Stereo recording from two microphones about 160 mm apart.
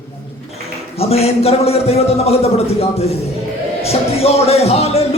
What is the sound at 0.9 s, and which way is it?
A man's voice, 40° left (ahead or behind).